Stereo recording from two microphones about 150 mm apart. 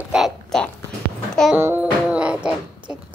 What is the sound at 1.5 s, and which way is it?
Music, 10° right (ahead or behind).